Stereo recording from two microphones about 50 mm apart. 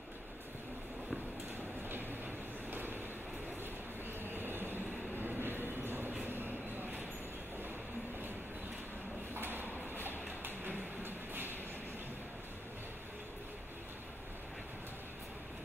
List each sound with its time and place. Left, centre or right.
1.9 s vehicle: right
4.3 s train: right
6.2 s vehicle: right
9.3 s a sound: right
11.0 s train: right